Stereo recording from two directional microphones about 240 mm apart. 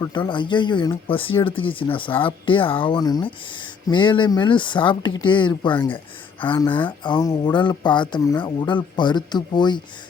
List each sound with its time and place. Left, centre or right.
0.0 s speech: centre